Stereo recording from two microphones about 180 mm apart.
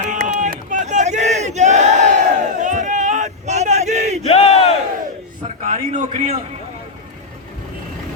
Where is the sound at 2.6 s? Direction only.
45° right (ahead or behind).